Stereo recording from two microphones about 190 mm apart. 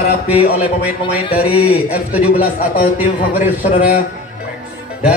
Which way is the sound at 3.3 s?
45° left (ahead or behind).